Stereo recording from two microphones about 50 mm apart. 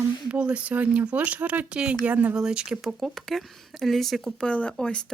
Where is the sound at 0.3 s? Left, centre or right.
Right.